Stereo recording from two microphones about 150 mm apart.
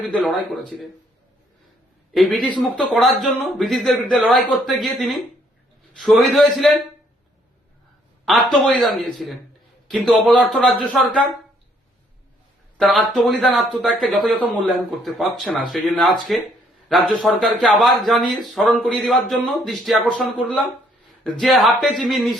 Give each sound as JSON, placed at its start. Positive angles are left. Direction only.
{"t": 0.0, "sound": "a man's voice", "side_deg": 5}
{"t": 2.1, "sound": "a man's voice", "side_deg": 0}
{"t": 8.2, "sound": "a man's voice", "side_deg": 0}
{"t": 12.7, "sound": "a man's voice", "side_deg": 0}